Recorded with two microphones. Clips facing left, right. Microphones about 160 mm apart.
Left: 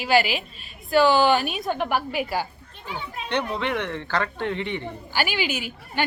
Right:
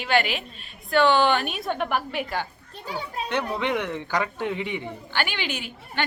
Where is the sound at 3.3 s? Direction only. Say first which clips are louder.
Left 1 dB; 5° right (ahead or behind).